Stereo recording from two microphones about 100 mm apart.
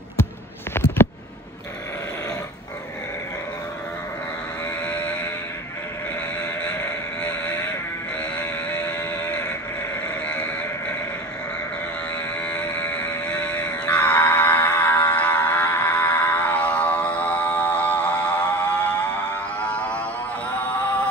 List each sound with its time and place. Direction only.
0.8 s a sound: 25° left (ahead or behind)
4.6 s sheep: 10° left (ahead or behind)
8.2 s sheep: 10° left (ahead or behind)
10.0 s sheep: 10° left (ahead or behind)
12.1 s a sound: 10° left (ahead or behind)
12.9 s music: 10° left (ahead or behind)